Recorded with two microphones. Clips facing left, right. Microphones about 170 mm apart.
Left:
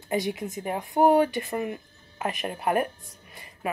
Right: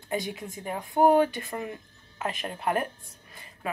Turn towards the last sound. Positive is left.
turn(degrees=5)  # may be behind; listen again after turning